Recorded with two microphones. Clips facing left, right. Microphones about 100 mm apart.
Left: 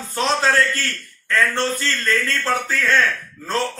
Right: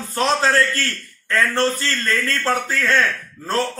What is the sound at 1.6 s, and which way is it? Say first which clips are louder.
A man's voice: right 2 dB; centre (ahead or behind).